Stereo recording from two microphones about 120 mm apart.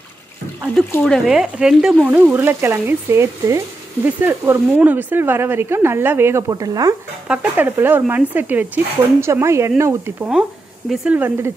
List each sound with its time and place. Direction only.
1.0 s speech: centre (ahead or behind); by 6.4 s 20° right (ahead or behind)
6.5 s speech: 30° right (ahead or behind)
7.2 s speech: 15° right (ahead or behind)